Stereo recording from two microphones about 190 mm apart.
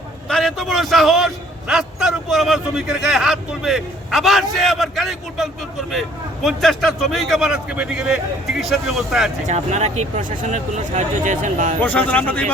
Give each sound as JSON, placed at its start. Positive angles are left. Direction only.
{"t": 0.3, "sound": "a man's voice", "side_deg": 5}
{"t": 9.5, "sound": "speech", "side_deg": -35}
{"t": 11.8, "sound": "speech", "side_deg": 10}